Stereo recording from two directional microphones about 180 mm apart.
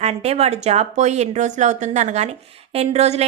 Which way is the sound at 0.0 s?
35° right (ahead or behind).